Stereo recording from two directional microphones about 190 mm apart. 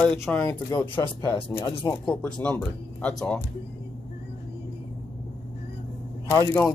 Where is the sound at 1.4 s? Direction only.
30° left (ahead or behind).